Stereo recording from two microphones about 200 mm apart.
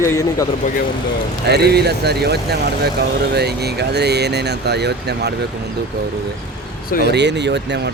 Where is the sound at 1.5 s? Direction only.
55° right (ahead or behind).